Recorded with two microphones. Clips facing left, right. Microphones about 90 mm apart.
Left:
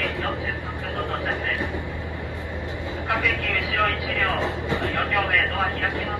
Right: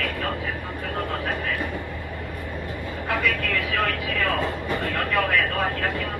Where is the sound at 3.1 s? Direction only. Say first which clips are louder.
Right 1 dB; 20° left (ahead or behind).